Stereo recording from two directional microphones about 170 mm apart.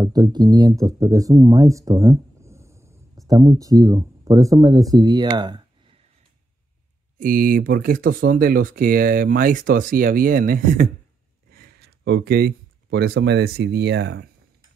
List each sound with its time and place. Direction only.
0.0 s speech: 25° right (ahead or behind)
7.2 s speech: 55° right (ahead or behind)
11.5 s speech: 65° right (ahead or behind); by 14.3 s 90° right